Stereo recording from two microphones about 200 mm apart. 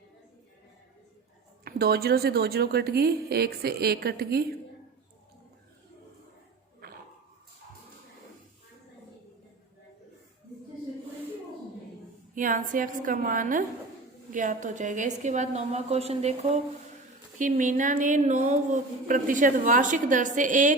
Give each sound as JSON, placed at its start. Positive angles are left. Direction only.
{"t": 1.6, "sound": "a woman's voice", "side_deg": -50}
{"t": 12.3, "sound": "a woman's voice", "side_deg": -40}